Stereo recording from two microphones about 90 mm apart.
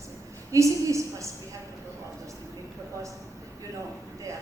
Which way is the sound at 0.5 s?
35° right (ahead or behind).